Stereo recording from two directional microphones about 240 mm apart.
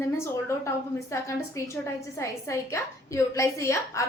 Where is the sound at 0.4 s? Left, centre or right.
Centre.